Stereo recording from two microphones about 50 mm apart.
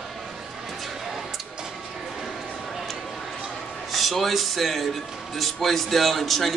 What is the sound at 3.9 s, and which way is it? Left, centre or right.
Music, centre.